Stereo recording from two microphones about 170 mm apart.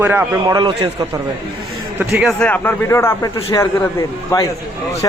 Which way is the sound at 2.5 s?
15° left (ahead or behind).